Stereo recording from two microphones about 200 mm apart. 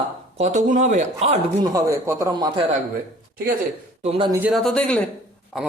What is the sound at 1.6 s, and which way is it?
Speech, 15° right (ahead or behind).